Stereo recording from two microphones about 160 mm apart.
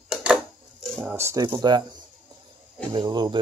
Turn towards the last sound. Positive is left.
turn(degrees=-25)  # may be behind; listen again after turning